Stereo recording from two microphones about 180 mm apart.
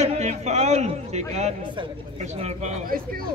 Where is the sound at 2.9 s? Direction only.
55° right (ahead or behind).